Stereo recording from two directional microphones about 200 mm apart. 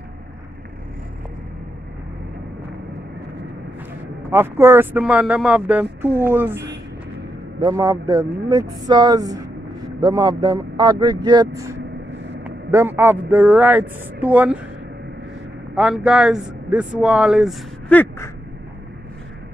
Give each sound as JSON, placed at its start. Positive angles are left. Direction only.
{"t": 4.3, "sound": "speech", "side_deg": -10}
{"t": 7.6, "sound": "speech", "side_deg": -15}
{"t": 15.7, "sound": "a man's voice", "side_deg": -5}
{"t": 17.8, "sound": "a sound", "side_deg": 10}